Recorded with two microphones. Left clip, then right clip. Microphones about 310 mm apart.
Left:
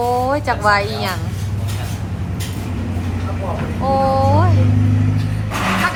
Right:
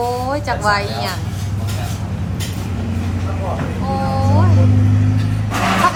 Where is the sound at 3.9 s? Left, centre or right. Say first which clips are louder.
Left 6 dB; centre.